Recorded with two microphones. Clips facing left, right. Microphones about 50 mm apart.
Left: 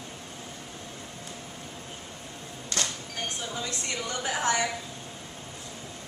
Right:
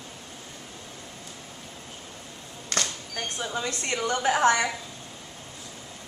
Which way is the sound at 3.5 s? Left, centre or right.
Right.